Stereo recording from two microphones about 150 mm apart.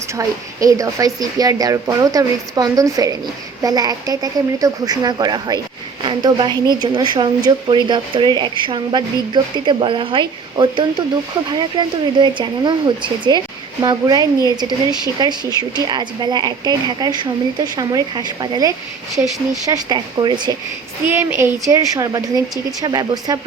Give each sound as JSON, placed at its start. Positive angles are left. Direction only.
{"t": 0.2, "sound": "a woman's voice", "side_deg": -20}
{"t": 21.1, "sound": "a woman's voice", "side_deg": -15}